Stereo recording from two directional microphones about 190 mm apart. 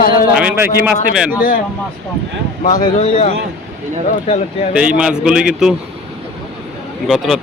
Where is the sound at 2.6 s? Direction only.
40° left (ahead or behind).